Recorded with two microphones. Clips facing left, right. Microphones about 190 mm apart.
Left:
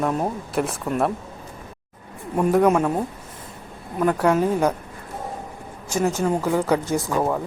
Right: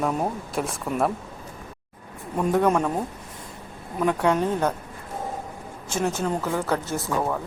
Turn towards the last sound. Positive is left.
turn(degrees=15)  # may be behind; listen again after turning